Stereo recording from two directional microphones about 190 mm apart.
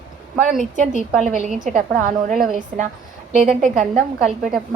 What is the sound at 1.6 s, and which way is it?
A woman's voice, 40° right (ahead or behind).